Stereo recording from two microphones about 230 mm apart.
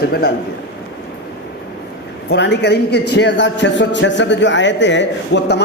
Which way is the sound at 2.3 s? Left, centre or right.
Left.